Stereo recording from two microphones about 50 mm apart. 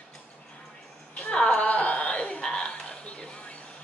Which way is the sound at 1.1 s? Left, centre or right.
Centre.